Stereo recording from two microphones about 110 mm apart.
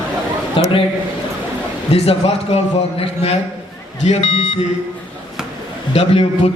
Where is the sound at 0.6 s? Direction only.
55° left (ahead or behind).